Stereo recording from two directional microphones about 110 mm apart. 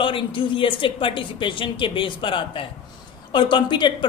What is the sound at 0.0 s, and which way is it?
A woman's voice, 50° left (ahead or behind).